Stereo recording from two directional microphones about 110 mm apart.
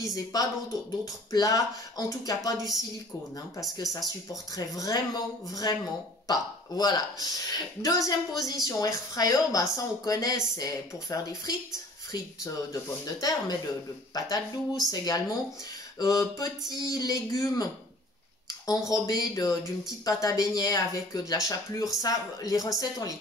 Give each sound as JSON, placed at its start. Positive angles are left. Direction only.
{"t": 0.0, "sound": "a woman's voice", "side_deg": 35}
{"t": 3.7, "sound": "a woman's voice", "side_deg": 30}
{"t": 18.7, "sound": "a woman's voice", "side_deg": 35}